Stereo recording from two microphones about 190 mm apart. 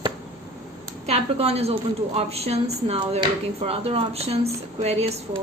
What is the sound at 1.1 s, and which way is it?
A woman's voice, 30° right (ahead or behind).